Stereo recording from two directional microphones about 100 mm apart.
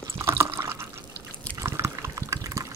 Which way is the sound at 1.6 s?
30° right (ahead or behind).